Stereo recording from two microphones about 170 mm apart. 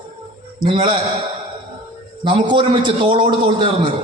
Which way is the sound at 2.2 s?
30° right (ahead or behind).